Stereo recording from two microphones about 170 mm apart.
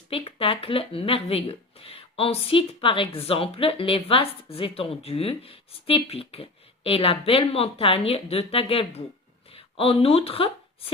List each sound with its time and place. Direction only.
0.1 s speech: 35° left (ahead or behind)